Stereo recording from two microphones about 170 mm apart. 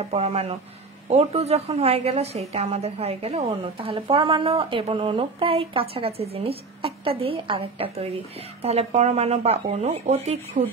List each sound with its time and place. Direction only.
0.1 s a woman's voice: 40° right (ahead or behind)